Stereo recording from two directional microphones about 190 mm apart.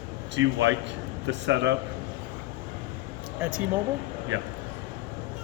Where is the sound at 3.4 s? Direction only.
5° right (ahead or behind).